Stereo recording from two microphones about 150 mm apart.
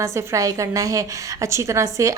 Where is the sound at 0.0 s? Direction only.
20° right (ahead or behind).